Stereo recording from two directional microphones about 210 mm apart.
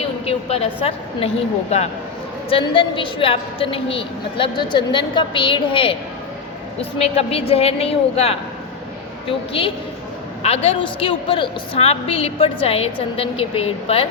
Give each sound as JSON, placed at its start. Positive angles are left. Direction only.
{"t": 0.0, "sound": "a woman's voice", "side_deg": 30}
{"t": 2.5, "sound": "a woman's voice", "side_deg": 25}
{"t": 7.0, "sound": "a woman's voice", "side_deg": 30}
{"t": 9.5, "sound": "a woman's voice", "side_deg": 25}